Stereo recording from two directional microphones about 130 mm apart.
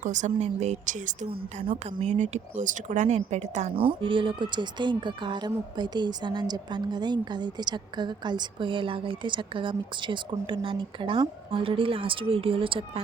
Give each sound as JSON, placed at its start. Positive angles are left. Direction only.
{"t": 0.0, "sound": "speech", "side_deg": -70}
{"t": 1.6, "sound": "speech", "side_deg": -50}
{"t": 3.8, "sound": "speech", "side_deg": -40}